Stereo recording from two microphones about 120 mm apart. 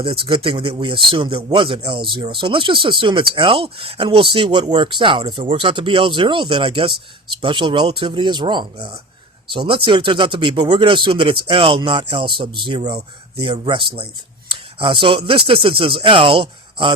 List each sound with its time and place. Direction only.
0.0 s speech: 45° right (ahead or behind)